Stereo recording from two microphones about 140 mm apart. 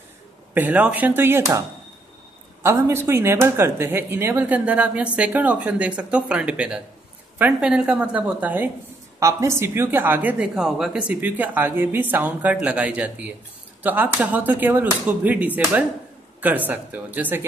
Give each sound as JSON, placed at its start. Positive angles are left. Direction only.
{"t": 0.6, "sound": "speech", "side_deg": -10}
{"t": 2.6, "sound": "speech", "side_deg": -20}